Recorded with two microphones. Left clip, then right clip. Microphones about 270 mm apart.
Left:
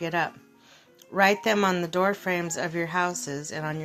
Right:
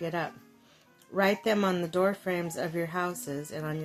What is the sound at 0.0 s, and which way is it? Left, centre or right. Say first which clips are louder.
Speech: left 6 dB; centre.